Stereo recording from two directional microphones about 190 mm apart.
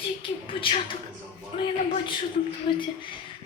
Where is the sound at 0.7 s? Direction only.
25° left (ahead or behind).